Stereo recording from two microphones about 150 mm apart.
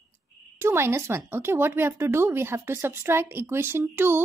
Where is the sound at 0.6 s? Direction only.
15° right (ahead or behind).